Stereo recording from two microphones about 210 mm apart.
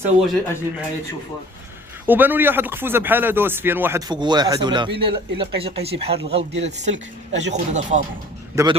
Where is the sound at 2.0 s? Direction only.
10° right (ahead or behind); by 8.0 s 35° right (ahead or behind).